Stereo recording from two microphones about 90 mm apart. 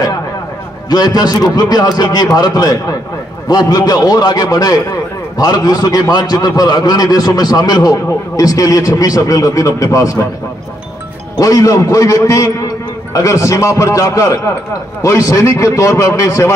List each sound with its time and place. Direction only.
0.8 s a man's voice: 50° left (ahead or behind)
11.3 s a man's voice: 40° left (ahead or behind)